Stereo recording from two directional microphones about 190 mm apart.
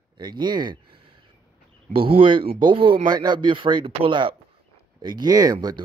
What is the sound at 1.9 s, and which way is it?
Speech, 30° right (ahead or behind).